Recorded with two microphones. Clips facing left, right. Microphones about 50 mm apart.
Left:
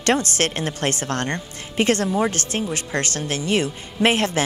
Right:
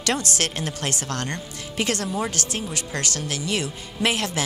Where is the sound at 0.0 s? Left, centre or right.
Left.